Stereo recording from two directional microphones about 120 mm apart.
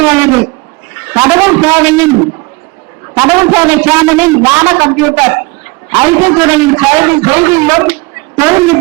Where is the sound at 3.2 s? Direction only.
20° right (ahead or behind).